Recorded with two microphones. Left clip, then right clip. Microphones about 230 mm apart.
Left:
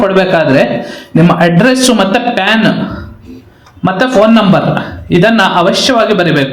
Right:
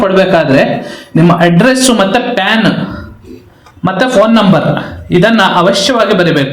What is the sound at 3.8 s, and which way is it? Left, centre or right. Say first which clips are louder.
A man's voice: even; left.